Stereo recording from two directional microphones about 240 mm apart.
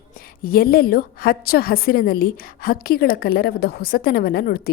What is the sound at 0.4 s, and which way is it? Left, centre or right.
A woman's voice, left.